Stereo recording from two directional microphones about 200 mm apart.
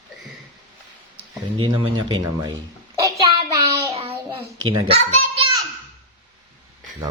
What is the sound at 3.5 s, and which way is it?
Child singing, 15° right (ahead or behind).